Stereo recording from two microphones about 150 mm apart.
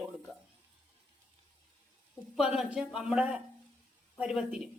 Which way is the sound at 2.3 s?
5° right (ahead or behind).